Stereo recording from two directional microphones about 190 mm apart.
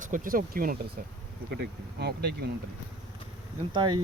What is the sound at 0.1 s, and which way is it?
Speech, 45° right (ahead or behind).